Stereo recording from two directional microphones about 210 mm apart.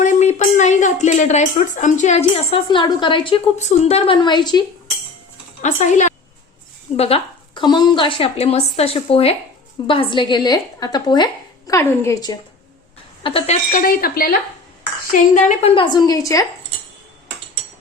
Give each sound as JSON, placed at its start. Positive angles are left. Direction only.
{"t": 0.0, "sound": "speech", "side_deg": 35}
{"t": 5.6, "sound": "a woman's voice", "side_deg": 35}
{"t": 13.7, "sound": "a woman's voice", "side_deg": 45}